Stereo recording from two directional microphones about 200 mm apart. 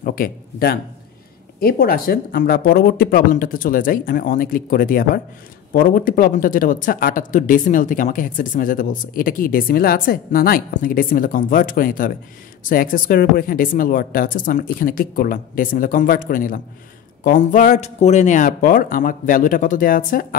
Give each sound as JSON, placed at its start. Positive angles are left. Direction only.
{"t": 0.0, "sound": "speech", "side_deg": 45}